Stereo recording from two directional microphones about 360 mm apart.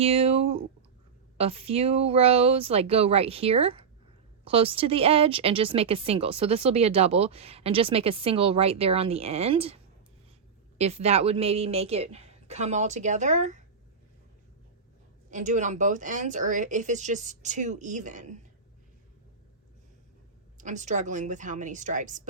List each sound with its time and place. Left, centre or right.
0.0 s speech: centre
15.3 s speech: centre
20.6 s speech: right